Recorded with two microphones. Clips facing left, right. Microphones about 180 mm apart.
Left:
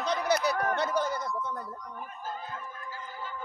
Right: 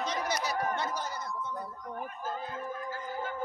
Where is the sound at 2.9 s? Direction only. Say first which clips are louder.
Right 4 dB; 50° right (ahead or behind).